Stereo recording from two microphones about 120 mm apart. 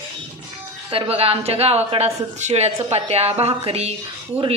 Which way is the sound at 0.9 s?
55° right (ahead or behind).